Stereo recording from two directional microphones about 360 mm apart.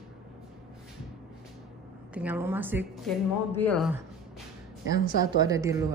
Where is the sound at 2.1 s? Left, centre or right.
Centre.